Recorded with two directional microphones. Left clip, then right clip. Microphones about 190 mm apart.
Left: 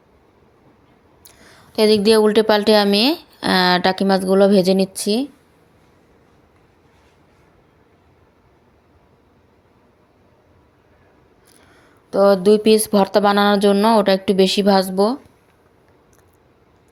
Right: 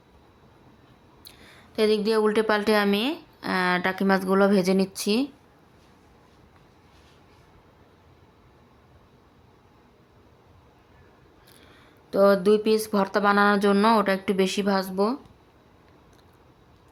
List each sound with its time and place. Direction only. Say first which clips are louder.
1.7 s speech: left 8 dB; 30° left (ahead or behind)
3.0 s speech: left 11 dB; 35° left (ahead or behind); by 5.3 s 10° left (ahead or behind)
11.7 s speech: left 6 dB; 10° left (ahead or behind)